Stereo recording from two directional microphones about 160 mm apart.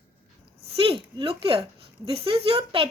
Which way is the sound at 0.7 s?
35° right (ahead or behind).